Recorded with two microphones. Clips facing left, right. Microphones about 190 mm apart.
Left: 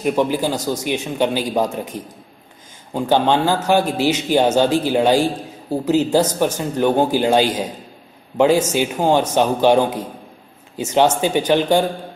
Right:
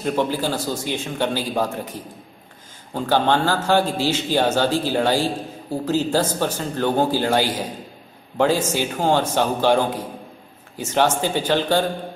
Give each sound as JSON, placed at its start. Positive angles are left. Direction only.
{"t": 0.0, "sound": "a man's voice", "side_deg": 15}